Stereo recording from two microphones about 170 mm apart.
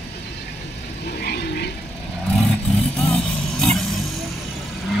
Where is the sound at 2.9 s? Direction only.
5° left (ahead or behind).